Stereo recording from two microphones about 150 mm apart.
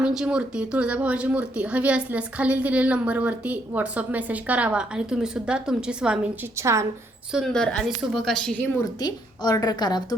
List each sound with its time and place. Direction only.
0.0 s speech: 5° right (ahead or behind)
6.6 s a woman's voice: 20° right (ahead or behind)
7.3 s a woman's voice: 5° left (ahead or behind)
8.8 s a woman's voice: 25° left (ahead or behind)